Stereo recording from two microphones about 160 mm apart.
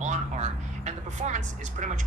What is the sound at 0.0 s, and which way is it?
A woman's voice, 45° right (ahead or behind).